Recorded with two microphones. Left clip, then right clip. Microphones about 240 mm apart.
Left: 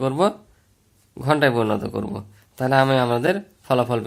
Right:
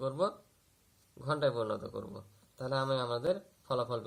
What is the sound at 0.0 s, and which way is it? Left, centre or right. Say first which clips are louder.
Speech: left 13 dB; left.